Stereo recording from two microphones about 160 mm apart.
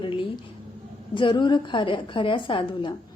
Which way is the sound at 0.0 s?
30° left (ahead or behind).